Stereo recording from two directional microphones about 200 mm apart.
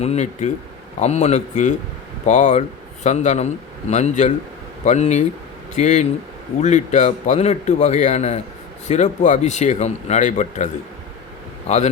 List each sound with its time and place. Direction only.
0.0 s speech: 35° left (ahead or behind)